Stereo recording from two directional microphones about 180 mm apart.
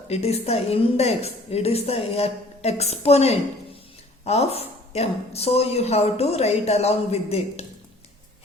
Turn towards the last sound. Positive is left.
turn(degrees=35)  # may be behind; listen again after turning